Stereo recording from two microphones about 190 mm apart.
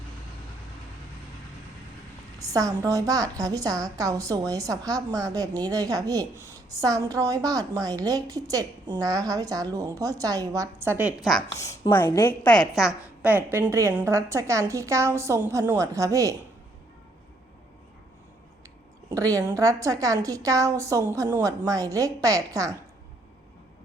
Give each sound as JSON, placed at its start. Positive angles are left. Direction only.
{"t": 2.4, "sound": "a woman's voice", "side_deg": -15}
{"t": 11.2, "sound": "a woman's voice", "side_deg": 0}
{"t": 11.5, "sound": "a woman's voice", "side_deg": 15}
{"t": 13.2, "sound": "a woman's voice", "side_deg": -10}
{"t": 19.1, "sound": "a woman's voice", "side_deg": -20}